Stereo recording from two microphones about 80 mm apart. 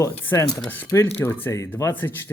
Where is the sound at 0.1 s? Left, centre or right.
Left.